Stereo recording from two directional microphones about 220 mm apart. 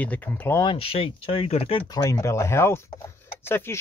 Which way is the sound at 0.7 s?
25° left (ahead or behind).